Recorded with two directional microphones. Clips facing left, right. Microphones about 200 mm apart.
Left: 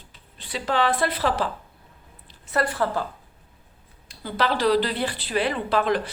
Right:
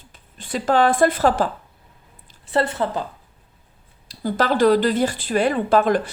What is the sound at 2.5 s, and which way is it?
Speech, 25° right (ahead or behind).